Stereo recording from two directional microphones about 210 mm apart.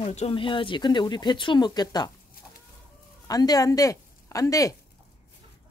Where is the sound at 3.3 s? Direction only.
20° left (ahead or behind).